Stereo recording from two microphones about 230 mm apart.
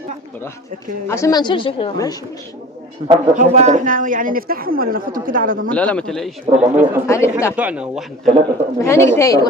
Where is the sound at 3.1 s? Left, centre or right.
Right.